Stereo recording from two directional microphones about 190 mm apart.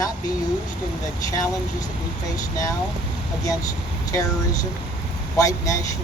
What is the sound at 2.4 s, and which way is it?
Speech, 20° left (ahead or behind).